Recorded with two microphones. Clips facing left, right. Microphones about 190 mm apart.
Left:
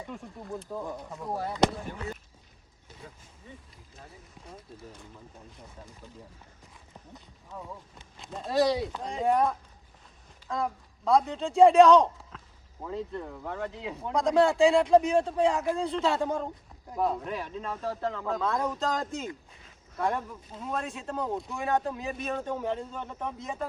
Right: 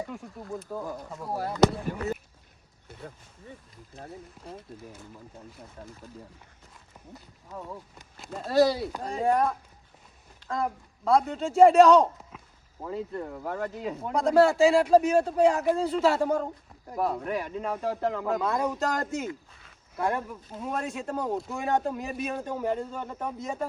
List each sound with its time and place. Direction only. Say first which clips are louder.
0.1 s speech: right 1 dB; 5° right (ahead or behind)
4.4 s speech: right 5 dB; centre (ahead or behind)
8.1 s speech: right 4 dB; 5° right (ahead or behind)
20.7 s speech: right 2 dB; 15° right (ahead or behind)
21.2 s speech: even; centre (ahead or behind)